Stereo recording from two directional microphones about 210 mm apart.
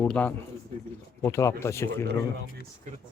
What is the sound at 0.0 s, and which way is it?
Speech, 5° left (ahead or behind).